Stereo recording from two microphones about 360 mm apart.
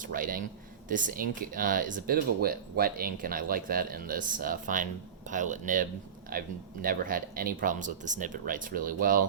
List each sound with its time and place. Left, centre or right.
0.0 s speech: right